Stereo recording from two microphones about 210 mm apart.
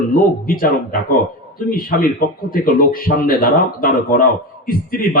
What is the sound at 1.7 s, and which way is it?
A man's voice, 40° left (ahead or behind).